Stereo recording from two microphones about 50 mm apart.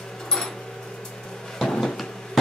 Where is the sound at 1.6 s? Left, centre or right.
Centre.